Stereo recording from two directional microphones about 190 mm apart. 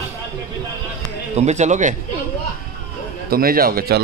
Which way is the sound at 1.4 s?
35° right (ahead or behind).